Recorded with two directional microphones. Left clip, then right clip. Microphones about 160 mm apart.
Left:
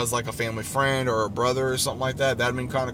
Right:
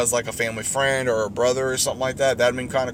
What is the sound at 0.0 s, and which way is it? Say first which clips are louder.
Speech: right 4 dB; 25° left (ahead or behind).